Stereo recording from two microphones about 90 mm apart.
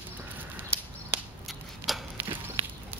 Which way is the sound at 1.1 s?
25° right (ahead or behind).